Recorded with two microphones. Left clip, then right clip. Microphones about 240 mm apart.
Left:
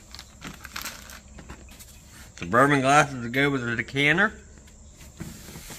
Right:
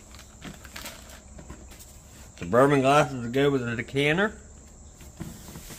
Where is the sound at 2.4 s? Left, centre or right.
Centre.